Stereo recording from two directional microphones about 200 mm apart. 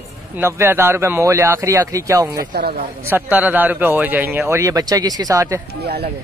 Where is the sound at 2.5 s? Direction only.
50° right (ahead or behind).